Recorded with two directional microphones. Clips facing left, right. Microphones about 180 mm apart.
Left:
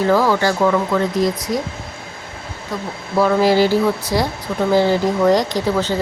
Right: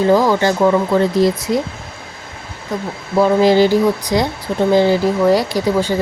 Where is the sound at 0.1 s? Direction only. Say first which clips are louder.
Right 2 dB; 15° right (ahead or behind).